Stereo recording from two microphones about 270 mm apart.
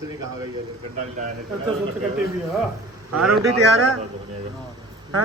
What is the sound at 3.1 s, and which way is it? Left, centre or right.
Speech, right.